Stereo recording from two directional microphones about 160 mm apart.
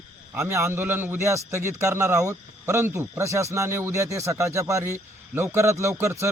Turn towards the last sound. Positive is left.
turn(degrees=-15)  # may be behind; listen again after turning